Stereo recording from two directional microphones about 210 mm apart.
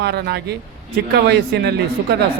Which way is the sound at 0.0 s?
50° right (ahead or behind).